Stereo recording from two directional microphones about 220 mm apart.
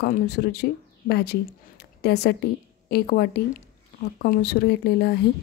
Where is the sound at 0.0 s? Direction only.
45° left (ahead or behind).